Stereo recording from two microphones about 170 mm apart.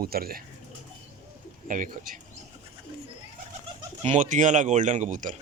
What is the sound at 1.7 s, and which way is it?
Speech, 50° right (ahead or behind).